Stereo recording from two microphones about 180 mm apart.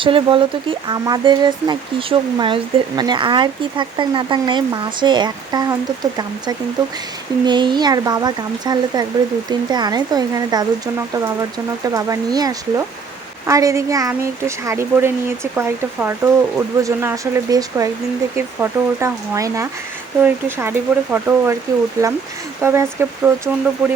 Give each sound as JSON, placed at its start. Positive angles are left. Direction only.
{"t": 0.0, "sound": "speech", "side_deg": -30}